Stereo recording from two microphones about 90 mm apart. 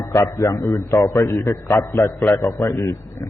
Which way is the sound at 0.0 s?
30° left (ahead or behind).